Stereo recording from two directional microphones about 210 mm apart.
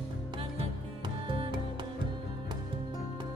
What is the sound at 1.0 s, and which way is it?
Music, 25° right (ahead or behind).